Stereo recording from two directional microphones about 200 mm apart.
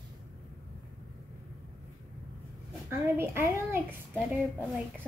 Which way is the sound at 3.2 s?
10° right (ahead or behind).